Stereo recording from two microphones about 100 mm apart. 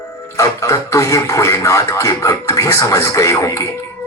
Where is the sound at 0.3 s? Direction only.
35° left (ahead or behind).